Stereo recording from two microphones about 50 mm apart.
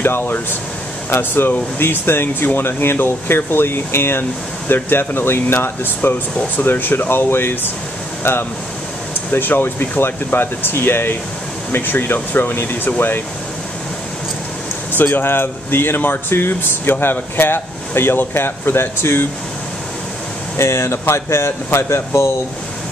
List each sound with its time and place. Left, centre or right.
0.0 s speech: left
14.9 s speech: left
20.5 s speech: left